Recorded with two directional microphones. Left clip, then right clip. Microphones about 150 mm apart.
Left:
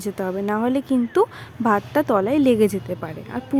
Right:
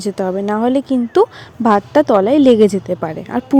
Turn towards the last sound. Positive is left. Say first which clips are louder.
# right 10 dB
turn(degrees=-40)  # may be behind; listen again after turning